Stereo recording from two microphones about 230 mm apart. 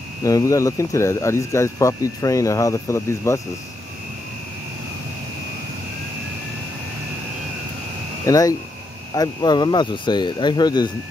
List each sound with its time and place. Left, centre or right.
0.2 s speech: centre
8.3 s speech: centre